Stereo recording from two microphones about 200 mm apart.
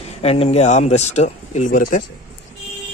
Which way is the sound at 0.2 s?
30° left (ahead or behind).